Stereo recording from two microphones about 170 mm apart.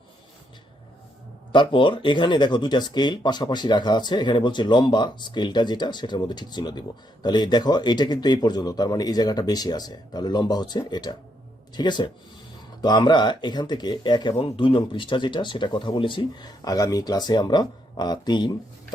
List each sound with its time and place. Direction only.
1.5 s speech: 30° left (ahead or behind)